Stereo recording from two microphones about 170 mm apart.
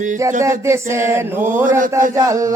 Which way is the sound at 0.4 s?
15° right (ahead or behind).